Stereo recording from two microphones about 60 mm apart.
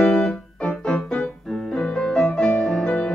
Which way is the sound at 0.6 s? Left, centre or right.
Centre.